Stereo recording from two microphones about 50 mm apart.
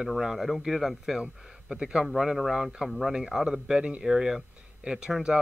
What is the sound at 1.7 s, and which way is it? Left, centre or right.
Speech, centre.